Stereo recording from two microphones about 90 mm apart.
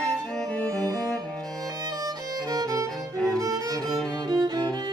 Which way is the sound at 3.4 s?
40° right (ahead or behind).